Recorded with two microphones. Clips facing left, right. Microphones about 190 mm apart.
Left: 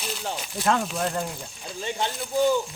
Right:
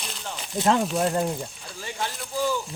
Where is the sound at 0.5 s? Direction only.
20° right (ahead or behind).